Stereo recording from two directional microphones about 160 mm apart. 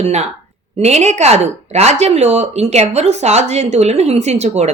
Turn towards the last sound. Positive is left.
turn(degrees=-45)  # may be behind; listen again after turning